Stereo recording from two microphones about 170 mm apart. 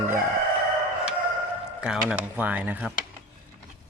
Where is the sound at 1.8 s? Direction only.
5° right (ahead or behind).